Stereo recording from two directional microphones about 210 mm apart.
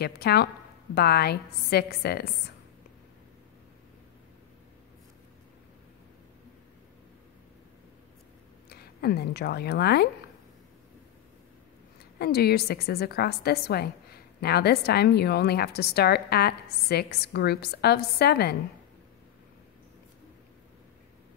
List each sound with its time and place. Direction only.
0.0 s a woman's voice: 50° left (ahead or behind)
8.6 s speech: 50° left (ahead or behind)
12.2 s a woman's voice: 50° left (ahead or behind)